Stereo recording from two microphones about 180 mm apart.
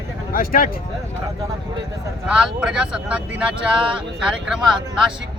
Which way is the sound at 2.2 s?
5° right (ahead or behind).